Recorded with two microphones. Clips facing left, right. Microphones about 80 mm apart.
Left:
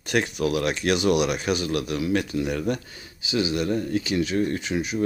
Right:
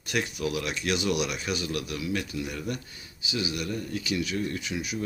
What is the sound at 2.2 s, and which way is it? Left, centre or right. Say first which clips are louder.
Speech: left 7 dB; left.